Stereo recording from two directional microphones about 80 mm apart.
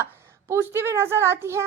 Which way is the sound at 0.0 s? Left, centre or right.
Right.